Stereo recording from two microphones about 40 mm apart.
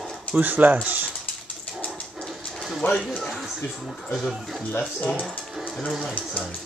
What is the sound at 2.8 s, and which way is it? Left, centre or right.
Speech, left.